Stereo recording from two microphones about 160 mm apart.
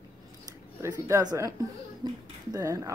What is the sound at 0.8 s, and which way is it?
A woman's voice, 20° right (ahead or behind).